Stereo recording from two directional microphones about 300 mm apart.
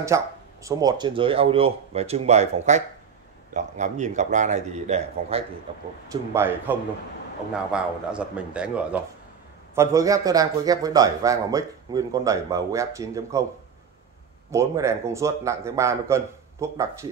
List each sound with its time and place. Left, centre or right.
0.1 s a man's voice: centre
6.3 s a man's voice: centre
14.5 s a man's voice: centre